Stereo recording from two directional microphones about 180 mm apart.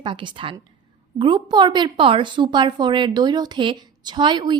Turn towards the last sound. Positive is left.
turn(degrees=-25)  # may be behind; listen again after turning